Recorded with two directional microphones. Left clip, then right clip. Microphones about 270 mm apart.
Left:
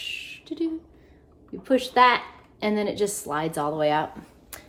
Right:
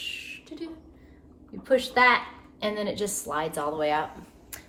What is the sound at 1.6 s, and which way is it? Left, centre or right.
A woman's voice, left.